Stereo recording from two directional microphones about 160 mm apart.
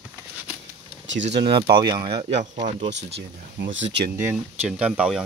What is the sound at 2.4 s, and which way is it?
Speech, 50° right (ahead or behind).